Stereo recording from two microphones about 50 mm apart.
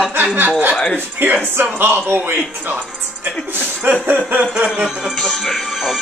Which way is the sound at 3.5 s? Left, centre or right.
Right.